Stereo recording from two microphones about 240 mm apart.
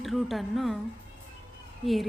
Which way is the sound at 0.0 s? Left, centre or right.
Centre.